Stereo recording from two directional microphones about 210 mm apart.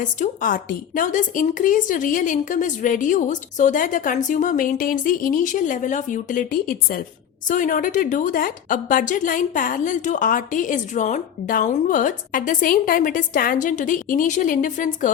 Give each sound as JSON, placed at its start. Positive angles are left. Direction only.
{"t": 0.0, "sound": "a woman's voice", "side_deg": 40}